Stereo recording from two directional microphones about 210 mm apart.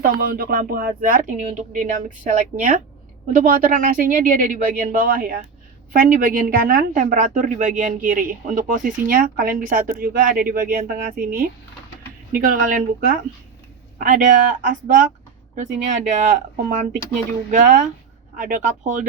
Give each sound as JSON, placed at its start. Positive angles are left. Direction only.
{"t": 0.0, "sound": "a woman's voice", "side_deg": -45}
{"t": 16.2, "sound": "a woman's voice", "side_deg": -40}